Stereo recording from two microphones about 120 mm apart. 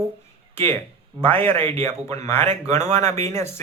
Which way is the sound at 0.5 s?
20° left (ahead or behind).